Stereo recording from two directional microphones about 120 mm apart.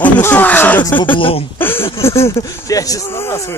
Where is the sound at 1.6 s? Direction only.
20° left (ahead or behind).